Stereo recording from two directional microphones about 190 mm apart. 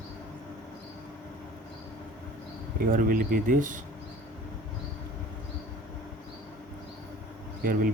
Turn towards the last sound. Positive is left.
turn(degrees=-45)  # may be behind; listen again after turning